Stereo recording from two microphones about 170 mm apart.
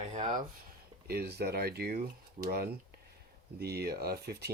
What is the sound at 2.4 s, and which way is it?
Speech, 45° right (ahead or behind).